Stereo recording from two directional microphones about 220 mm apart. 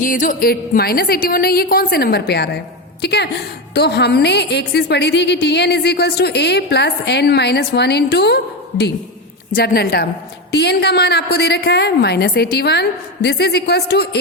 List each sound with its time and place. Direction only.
0.0 s a woman's voice: 35° left (ahead or behind)
9.6 s a woman's voice: 45° left (ahead or behind)